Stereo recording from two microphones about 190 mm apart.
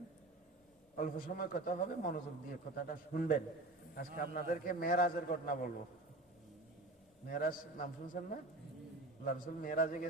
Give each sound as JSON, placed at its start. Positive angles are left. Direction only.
{"t": 0.9, "sound": "a man's voice", "side_deg": 45}
{"t": 7.3, "sound": "a man's voice", "side_deg": 50}